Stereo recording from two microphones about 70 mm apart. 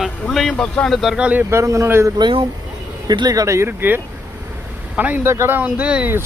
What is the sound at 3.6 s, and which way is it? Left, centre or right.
Speech, right.